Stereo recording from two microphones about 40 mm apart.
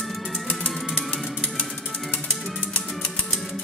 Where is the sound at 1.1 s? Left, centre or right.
Left.